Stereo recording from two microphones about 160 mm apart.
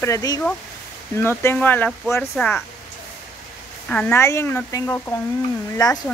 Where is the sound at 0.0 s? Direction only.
20° left (ahead or behind).